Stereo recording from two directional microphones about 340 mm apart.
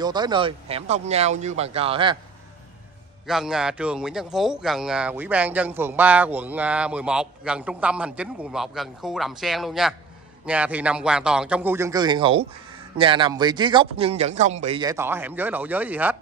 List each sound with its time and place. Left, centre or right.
0.0 s speech: centre
3.3 s a man's voice: centre